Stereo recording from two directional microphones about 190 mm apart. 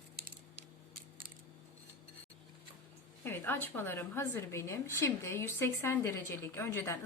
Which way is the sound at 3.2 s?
10° left (ahead or behind).